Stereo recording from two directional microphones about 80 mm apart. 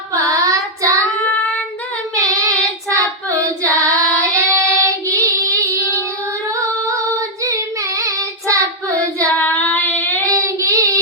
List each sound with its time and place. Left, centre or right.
0.1 s child singing: right
2.3 s child singing: right
6.5 s female singing: right
7.4 s child singing: right
9.4 s child singing: left
10.2 s child singing: right